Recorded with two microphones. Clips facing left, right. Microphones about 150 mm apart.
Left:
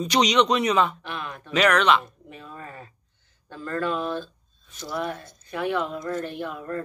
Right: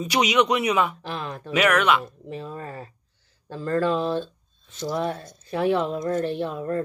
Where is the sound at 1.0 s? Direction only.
35° right (ahead or behind).